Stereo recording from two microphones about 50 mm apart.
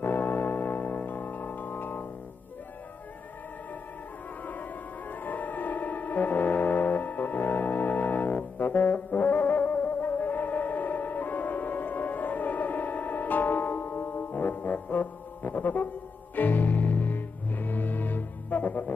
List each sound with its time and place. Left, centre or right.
0.0 s music: left
4.5 s music: left